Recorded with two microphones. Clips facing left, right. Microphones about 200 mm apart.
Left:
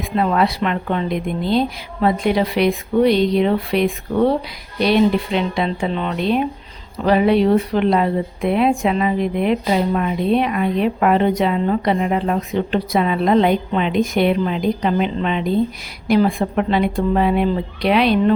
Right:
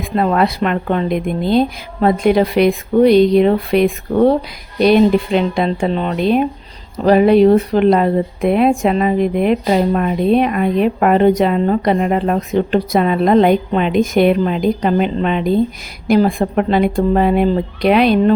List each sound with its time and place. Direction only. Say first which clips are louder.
0.2 s speech: right 3 dB; 50° right (ahead or behind)